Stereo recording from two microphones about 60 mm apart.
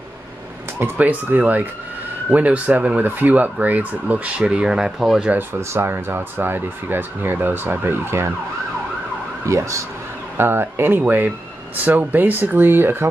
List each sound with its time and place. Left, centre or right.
0.7 s speech: right; by 5.3 s centre
5.8 s speech: right
9.5 s speech: right
10.3 s speech: right